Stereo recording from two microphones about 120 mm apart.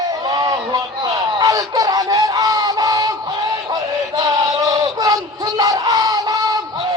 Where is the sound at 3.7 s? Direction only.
30° right (ahead or behind).